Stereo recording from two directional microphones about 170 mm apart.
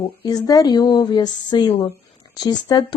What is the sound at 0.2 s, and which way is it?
A woman's voice, 20° left (ahead or behind).